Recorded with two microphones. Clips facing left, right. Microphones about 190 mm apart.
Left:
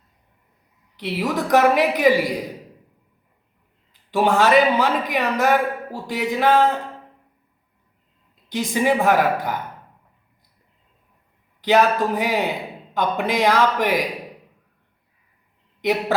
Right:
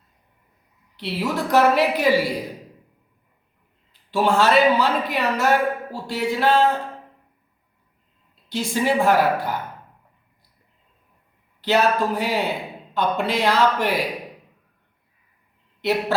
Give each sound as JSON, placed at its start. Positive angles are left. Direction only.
{"t": 0.9, "sound": "a man's voice", "side_deg": 15}
{"t": 4.1, "sound": "a man's voice", "side_deg": 15}
{"t": 8.4, "sound": "a man's voice", "side_deg": 15}
{"t": 11.6, "sound": "a man's voice", "side_deg": 15}
{"t": 15.8, "sound": "a man's voice", "side_deg": 15}